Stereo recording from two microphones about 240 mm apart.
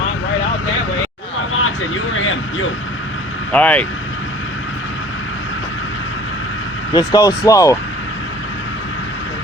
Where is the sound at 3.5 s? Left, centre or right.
Centre.